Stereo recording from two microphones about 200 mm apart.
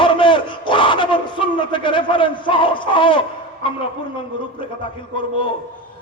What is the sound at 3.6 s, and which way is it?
Speech, 25° left (ahead or behind).